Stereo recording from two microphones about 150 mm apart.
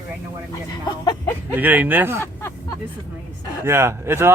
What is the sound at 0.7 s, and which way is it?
Speech, 25° left (ahead or behind).